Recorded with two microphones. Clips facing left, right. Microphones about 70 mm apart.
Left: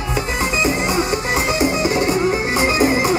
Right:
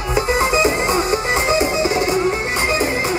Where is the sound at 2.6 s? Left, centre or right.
Centre.